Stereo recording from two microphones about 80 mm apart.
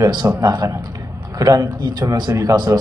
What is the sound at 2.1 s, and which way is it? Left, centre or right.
Speech, right.